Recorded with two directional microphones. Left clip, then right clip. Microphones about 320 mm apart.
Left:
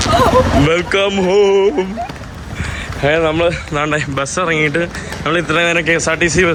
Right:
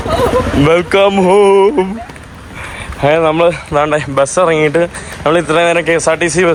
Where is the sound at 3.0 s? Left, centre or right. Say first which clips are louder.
Right 4 dB; centre.